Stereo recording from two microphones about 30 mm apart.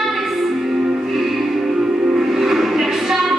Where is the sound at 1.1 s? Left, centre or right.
Centre.